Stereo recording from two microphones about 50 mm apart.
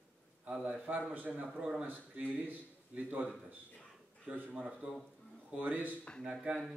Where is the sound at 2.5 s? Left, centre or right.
Right.